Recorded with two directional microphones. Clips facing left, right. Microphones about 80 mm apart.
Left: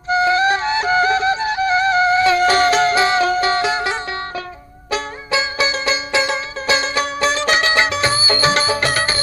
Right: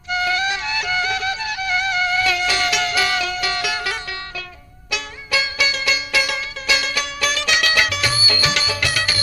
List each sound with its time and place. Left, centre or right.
0.1 s music: left